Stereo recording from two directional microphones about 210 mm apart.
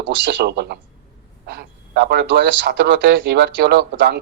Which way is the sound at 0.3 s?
55° right (ahead or behind).